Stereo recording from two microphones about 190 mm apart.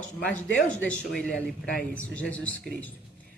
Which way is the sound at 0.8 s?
5° left (ahead or behind).